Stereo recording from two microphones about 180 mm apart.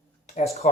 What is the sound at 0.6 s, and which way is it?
Speech, 40° left (ahead or behind).